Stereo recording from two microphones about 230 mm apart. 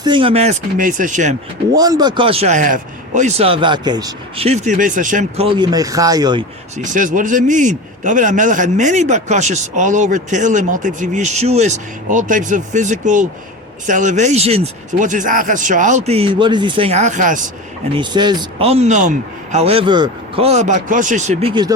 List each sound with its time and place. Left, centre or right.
0.0 s a man's voice: right
1.7 s a man's voice: centre; by 5.5 s right
5.5 s speech: centre
6.7 s a man's voice: right
17.9 s a man's voice: centre